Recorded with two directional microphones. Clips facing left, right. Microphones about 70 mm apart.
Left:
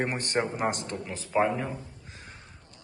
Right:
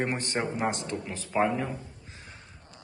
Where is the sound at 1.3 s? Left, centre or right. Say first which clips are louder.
Left 1 dB; centre.